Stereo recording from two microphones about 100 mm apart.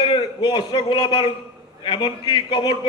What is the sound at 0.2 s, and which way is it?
A man's voice, 50° left (ahead or behind).